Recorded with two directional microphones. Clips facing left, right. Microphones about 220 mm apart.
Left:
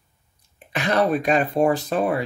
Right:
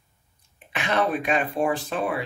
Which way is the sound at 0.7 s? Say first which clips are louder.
Left 4 dB; 40° left (ahead or behind).